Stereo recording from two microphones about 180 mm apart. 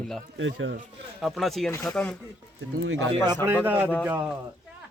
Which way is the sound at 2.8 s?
90° right.